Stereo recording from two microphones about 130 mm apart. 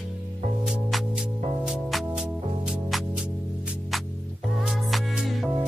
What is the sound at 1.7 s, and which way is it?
Music, 5° right (ahead or behind).